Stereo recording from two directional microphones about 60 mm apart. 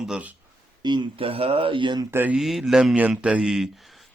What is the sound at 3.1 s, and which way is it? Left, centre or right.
Speech, centre.